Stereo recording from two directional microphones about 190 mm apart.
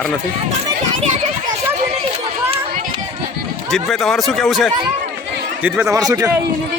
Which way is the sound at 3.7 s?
Centre (ahead or behind).